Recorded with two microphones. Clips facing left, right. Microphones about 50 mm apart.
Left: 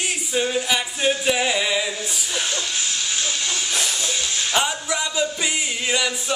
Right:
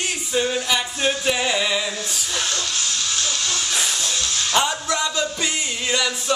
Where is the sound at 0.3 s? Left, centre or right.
Centre.